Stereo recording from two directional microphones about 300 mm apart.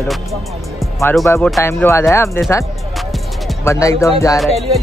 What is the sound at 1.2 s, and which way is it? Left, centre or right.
Speech, centre.